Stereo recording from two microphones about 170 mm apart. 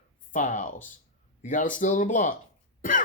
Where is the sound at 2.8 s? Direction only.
50° left (ahead or behind).